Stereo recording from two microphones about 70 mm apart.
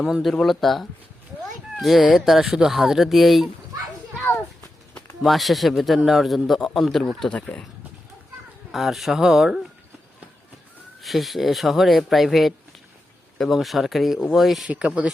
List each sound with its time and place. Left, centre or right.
0.0 s speech: centre
5.2 s speech: centre
7.3 s speech: centre
8.7 s speech: centre
11.0 s speech: centre
14.7 s speech: centre